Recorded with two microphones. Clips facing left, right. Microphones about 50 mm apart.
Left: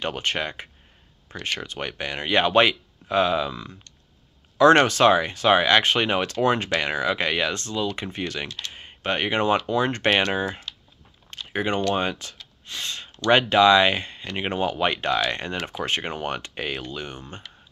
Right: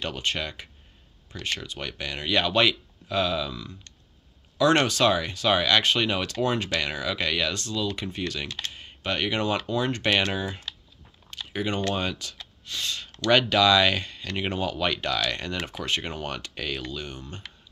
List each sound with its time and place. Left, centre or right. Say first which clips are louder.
0.1 s speech: left 3 dB; left
11.2 s chewing: left 4 dB; left
11.9 s speech: left 4 dB; left
12.6 s gasp: even; left
13.3 s speech: left 4 dB; left